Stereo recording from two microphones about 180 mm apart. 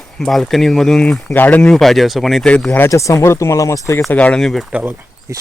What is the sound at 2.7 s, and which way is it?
Speech, 15° left (ahead or behind).